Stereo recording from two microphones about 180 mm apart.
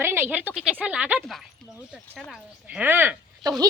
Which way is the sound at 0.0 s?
15° right (ahead or behind).